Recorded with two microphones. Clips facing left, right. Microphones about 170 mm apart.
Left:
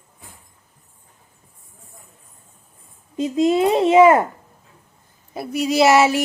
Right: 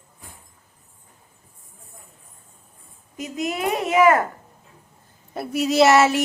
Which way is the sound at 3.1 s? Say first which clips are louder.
Left 10 dB; 25° left (ahead or behind).